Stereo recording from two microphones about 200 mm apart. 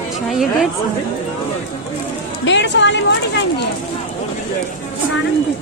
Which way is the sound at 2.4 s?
65° left (ahead or behind).